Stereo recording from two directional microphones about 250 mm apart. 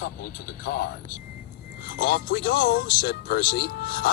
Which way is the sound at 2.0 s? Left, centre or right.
Left.